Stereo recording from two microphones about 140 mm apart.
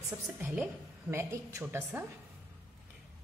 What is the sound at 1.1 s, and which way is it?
Speech, 20° right (ahead or behind).